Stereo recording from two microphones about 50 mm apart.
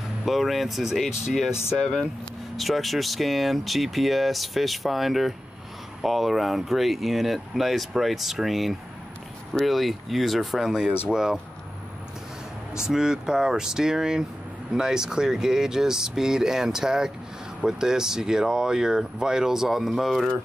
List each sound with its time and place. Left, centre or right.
0.2 s speech: centre
2.5 s speech: centre
12.7 s speech: centre